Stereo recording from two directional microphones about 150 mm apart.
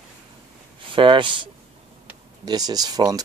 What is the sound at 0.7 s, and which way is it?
Speech, 35° right (ahead or behind).